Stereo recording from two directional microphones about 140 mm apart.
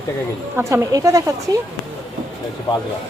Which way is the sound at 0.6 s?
20° right (ahead or behind).